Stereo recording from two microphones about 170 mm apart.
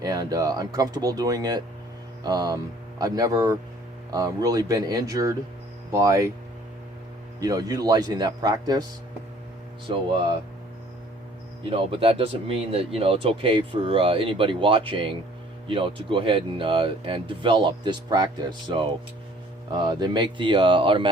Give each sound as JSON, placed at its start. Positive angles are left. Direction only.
{"t": 0.0, "sound": "speech", "side_deg": -20}
{"t": 7.3, "sound": "speech", "side_deg": -20}
{"t": 11.7, "sound": "speech", "side_deg": -30}